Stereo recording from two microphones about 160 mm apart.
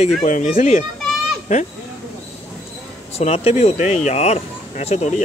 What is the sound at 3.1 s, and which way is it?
A man's voice, 40° left (ahead or behind).